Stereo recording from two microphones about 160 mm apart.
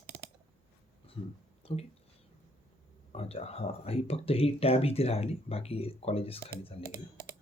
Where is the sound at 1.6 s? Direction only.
35° left (ahead or behind).